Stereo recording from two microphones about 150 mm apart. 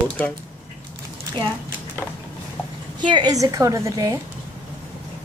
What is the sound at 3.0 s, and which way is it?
A woman's voice, 30° right (ahead or behind).